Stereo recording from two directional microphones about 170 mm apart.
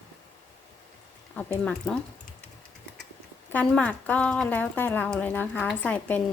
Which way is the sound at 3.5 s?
5° left (ahead or behind).